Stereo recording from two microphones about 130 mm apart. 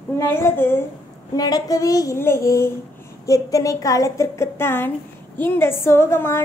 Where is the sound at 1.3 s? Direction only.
30° left (ahead or behind).